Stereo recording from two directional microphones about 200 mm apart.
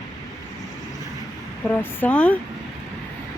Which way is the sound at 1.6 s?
10° left (ahead or behind).